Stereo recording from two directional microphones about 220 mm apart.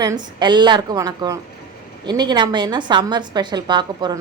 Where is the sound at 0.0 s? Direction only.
20° right (ahead or behind).